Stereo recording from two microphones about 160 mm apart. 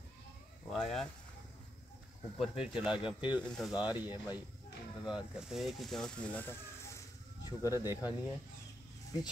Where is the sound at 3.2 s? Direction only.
30° left (ahead or behind).